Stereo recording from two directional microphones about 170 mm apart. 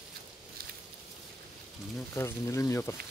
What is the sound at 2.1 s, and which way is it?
Speech, 15° left (ahead or behind).